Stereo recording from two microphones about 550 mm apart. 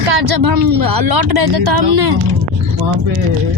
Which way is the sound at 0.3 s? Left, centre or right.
Right.